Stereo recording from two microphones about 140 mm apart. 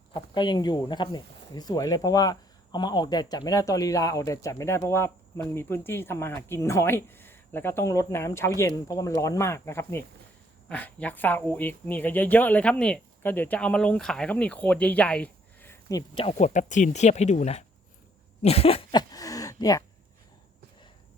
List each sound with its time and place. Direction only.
0.1 s speech: 30° left (ahead or behind)
16.4 s speech: 60° left (ahead or behind)
18.4 s a sound: 45° left (ahead or behind); by 19.8 s 25° left (ahead or behind)